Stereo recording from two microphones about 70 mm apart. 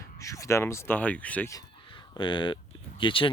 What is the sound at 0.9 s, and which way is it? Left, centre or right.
Speech, left.